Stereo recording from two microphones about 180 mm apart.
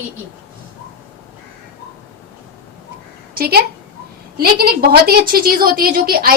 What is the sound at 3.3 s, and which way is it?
A woman's voice, 55° right (ahead or behind).